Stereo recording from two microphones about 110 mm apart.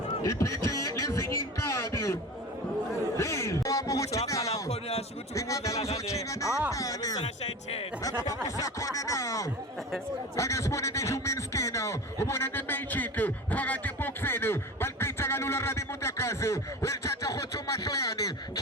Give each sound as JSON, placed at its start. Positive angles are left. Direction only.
{"t": 0.2, "sound": "speech", "side_deg": 30}
{"t": 3.2, "sound": "speech", "side_deg": 25}
{"t": 4.7, "sound": "a sound", "side_deg": 70}
{"t": 5.3, "sound": "speech", "side_deg": 30}
{"t": 6.7, "sound": "music", "side_deg": 30}
{"t": 8.0, "sound": "speech", "side_deg": 30}
{"t": 10.3, "sound": "a sound", "side_deg": 30}